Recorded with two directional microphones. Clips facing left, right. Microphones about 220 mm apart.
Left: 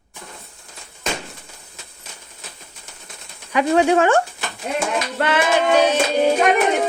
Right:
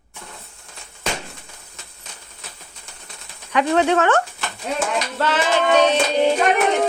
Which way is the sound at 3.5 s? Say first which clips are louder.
Left 2 dB; 10° left (ahead or behind).